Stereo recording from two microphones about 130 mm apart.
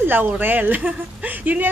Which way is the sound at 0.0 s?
15° right (ahead or behind).